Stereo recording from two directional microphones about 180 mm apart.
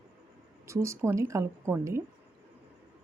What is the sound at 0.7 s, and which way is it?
A woman's voice, 15° right (ahead or behind).